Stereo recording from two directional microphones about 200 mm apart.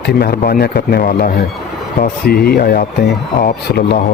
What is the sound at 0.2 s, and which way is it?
Speech, 50° left (ahead or behind).